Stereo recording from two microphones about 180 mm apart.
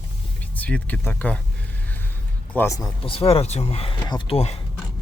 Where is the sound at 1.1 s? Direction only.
10° left (ahead or behind).